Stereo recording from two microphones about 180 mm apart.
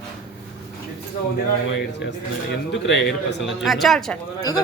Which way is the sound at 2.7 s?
85° left.